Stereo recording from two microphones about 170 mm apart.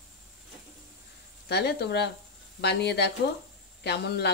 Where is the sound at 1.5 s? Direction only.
75° left (ahead or behind).